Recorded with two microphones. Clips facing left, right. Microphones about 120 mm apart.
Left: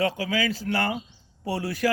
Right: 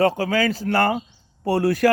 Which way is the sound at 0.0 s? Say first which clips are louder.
Right 6 dB; 45° right (ahead or behind).